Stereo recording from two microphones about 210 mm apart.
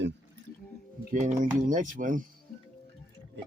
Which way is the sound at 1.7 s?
40° right (ahead or behind).